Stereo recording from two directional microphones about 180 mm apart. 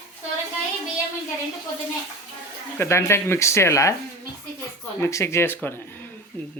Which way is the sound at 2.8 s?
15° left (ahead or behind).